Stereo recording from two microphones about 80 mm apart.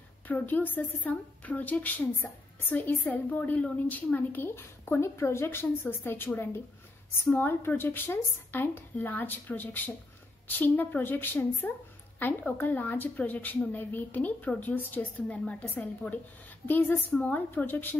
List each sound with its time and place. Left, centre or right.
0.3 s a woman's voice: left